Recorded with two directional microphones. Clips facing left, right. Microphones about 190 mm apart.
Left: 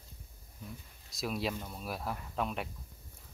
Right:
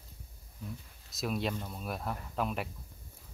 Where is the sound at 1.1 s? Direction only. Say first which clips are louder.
Right 1 dB; centre (ahead or behind).